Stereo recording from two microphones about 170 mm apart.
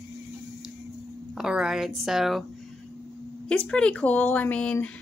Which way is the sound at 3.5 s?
5° left (ahead or behind).